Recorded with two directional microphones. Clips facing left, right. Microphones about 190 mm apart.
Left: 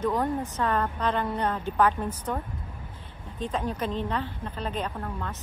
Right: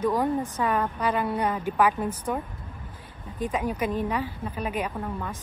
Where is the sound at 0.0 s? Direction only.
10° right (ahead or behind).